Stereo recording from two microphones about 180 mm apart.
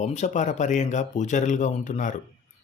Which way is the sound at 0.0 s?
40° left (ahead or behind).